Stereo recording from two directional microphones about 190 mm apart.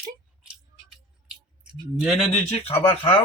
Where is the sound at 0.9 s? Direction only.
5° right (ahead or behind).